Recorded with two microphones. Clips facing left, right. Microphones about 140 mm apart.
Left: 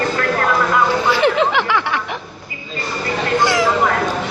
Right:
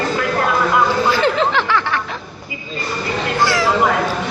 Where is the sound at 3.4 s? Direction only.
20° left (ahead or behind).